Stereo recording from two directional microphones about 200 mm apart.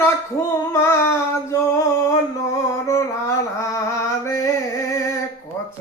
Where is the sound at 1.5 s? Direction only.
15° left (ahead or behind).